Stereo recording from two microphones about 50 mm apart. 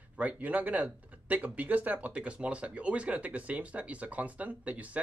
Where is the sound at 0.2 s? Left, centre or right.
Right.